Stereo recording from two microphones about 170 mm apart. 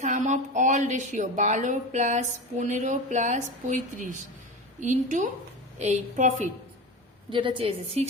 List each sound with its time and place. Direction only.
0.0 s speech: 45° right (ahead or behind)
7.3 s a woman's voice: 30° right (ahead or behind)